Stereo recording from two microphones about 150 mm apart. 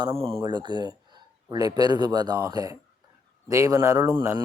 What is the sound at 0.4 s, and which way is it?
Speech, 30° right (ahead or behind).